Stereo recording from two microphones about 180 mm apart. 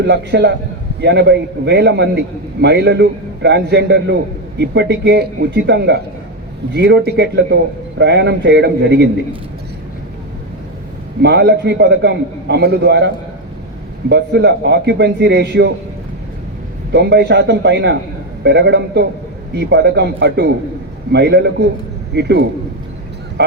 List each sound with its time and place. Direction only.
0.0 s a man's voice: 70° right (ahead or behind)
11.2 s a man's voice: 70° right (ahead or behind)
14.1 s a man's voice: 70° right (ahead or behind)
16.9 s a man's voice: 70° right (ahead or behind)